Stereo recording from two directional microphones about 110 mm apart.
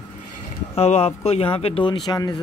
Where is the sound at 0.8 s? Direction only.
70° left (ahead or behind); by 2.2 s 50° left (ahead or behind).